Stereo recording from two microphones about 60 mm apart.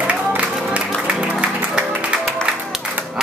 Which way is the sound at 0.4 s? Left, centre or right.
Centre.